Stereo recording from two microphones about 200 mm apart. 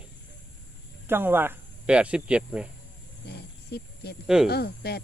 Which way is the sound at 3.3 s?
55° left (ahead or behind).